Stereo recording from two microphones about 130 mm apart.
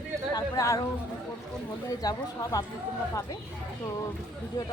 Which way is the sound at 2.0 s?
30° left (ahead or behind).